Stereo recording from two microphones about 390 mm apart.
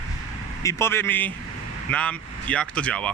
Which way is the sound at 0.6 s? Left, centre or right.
Centre.